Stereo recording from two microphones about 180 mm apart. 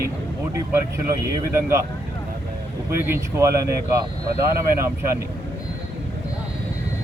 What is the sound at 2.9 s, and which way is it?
Speech, 15° right (ahead or behind).